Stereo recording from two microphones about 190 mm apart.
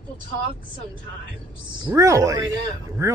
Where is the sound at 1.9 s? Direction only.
15° right (ahead or behind).